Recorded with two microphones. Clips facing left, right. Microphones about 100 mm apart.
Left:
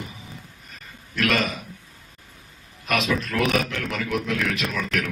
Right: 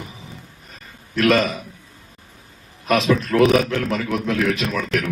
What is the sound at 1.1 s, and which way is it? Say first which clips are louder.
Speech: right 6 dB; 35° right (ahead or behind).